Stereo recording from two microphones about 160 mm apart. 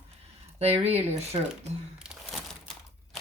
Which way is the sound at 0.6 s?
40° right (ahead or behind).